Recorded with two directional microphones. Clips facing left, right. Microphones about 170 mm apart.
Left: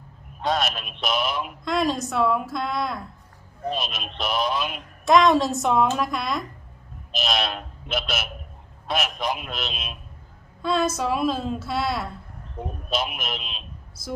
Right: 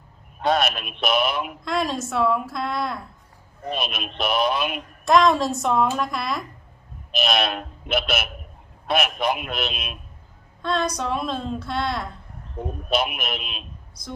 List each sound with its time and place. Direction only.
0.4 s speech: 60° right (ahead or behind)
1.6 s speech: centre (ahead or behind)
3.7 s speech: 60° right (ahead or behind)
5.0 s speech: centre (ahead or behind)
7.1 s speech: 60° right (ahead or behind)
10.6 s speech: 5° left (ahead or behind)
12.9 s speech: 60° right (ahead or behind)